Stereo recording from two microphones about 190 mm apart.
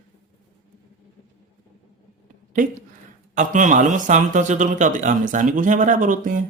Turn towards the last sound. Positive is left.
turn(degrees=-40)  # may be behind; listen again after turning